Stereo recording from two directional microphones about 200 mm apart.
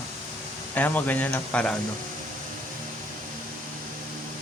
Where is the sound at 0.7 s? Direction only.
10° left (ahead or behind).